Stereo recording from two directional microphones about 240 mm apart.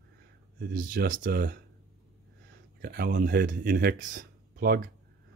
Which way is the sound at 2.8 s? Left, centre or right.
Right.